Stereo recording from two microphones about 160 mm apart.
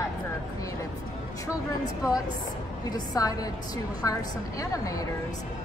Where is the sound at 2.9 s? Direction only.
25° left (ahead or behind).